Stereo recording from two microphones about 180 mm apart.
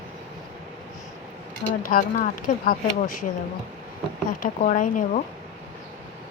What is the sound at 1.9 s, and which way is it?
Speech, 50° left (ahead or behind).